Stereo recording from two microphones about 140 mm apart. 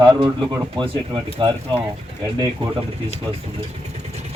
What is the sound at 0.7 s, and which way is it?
Speech, 40° right (ahead or behind).